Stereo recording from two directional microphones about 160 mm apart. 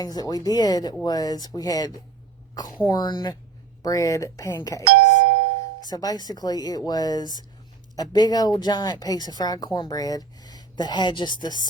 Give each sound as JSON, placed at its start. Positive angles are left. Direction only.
{"t": 0.0, "sound": "speech", "side_deg": 25}
{"t": 4.9, "sound": "doorbell", "side_deg": -90}
{"t": 5.8, "sound": "speech", "side_deg": 25}